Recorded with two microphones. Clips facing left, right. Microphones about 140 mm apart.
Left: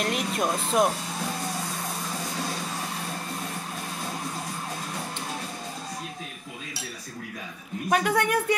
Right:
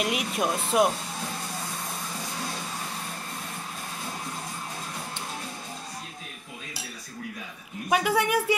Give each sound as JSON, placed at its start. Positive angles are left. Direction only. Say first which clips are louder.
{"t": 0.0, "sound": "speech", "louder": "even", "side_deg": -5}
{"t": 7.9, "sound": "speech", "louder": "even", "side_deg": -5}